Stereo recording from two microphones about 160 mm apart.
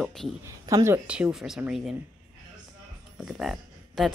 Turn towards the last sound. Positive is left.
turn(degrees=0)  # may be behind; listen again after turning